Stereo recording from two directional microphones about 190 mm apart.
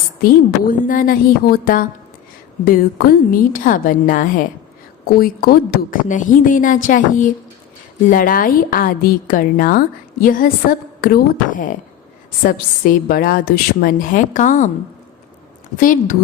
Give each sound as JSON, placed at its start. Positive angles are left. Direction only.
{"t": 0.2, "sound": "a woman's voice", "side_deg": 45}
{"t": 15.8, "sound": "a woman's voice", "side_deg": 45}